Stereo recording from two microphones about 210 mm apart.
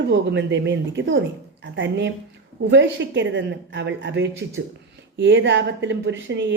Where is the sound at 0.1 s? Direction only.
60° right (ahead or behind).